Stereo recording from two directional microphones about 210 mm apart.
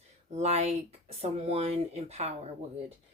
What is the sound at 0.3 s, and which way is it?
Speech, 30° right (ahead or behind).